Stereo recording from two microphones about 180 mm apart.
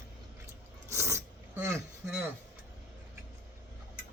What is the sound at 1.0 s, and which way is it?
Throat clearing, 15° right (ahead or behind).